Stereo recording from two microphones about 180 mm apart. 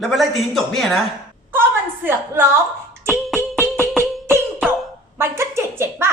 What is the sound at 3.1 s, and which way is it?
Beatboxing, centre (ahead or behind).